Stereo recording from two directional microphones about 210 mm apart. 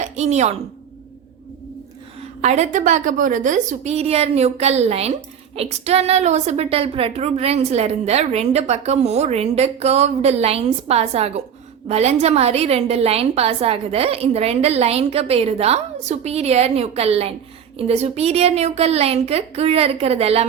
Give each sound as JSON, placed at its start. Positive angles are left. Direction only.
{"t": 0.0, "sound": "a woman's voice", "side_deg": -30}
{"t": 2.4, "sound": "a woman's voice", "side_deg": -30}